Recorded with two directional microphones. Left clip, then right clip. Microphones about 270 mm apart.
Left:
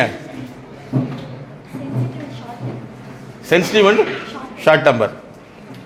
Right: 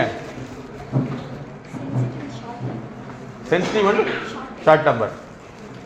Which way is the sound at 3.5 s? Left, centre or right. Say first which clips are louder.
Left 6 dB; left.